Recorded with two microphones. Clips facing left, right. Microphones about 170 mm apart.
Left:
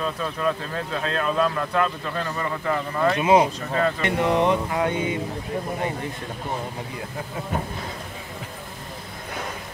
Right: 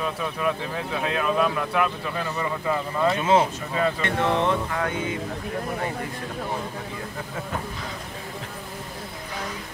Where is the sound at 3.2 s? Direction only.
15° left (ahead or behind).